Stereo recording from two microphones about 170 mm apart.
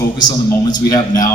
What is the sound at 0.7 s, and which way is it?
Speech, 20° left (ahead or behind).